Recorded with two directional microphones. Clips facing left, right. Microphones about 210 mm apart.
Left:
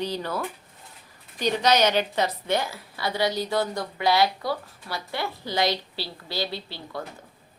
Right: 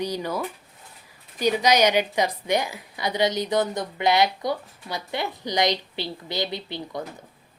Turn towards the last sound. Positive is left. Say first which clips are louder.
# right 3 dB
turn(degrees=-20)  # may be behind; listen again after turning